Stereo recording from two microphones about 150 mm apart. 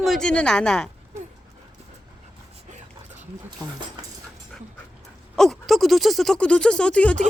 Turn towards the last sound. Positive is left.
turn(degrees=10)  # may be behind; listen again after turning